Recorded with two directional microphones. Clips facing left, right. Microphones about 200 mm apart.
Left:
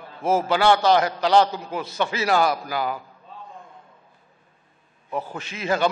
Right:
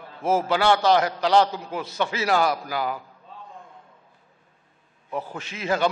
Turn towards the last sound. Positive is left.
turn(degrees=20)  # may be behind; listen again after turning